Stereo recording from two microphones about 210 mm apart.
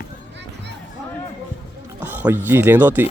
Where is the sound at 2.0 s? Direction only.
10° right (ahead or behind).